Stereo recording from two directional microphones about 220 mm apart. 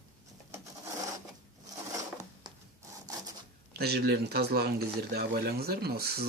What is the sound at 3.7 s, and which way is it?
Speech, 45° right (ahead or behind).